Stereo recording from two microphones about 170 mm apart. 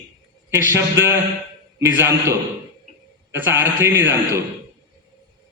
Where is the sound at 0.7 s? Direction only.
15° right (ahead or behind).